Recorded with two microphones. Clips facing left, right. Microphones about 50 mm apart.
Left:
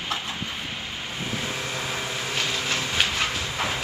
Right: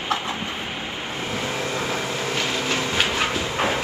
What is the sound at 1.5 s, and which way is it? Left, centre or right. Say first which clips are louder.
Vehicle: right 4 dB; right.